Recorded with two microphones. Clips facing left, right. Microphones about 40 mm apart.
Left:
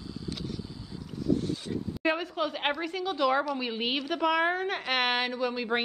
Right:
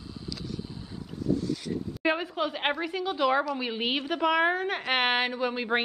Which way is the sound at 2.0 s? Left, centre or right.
Centre.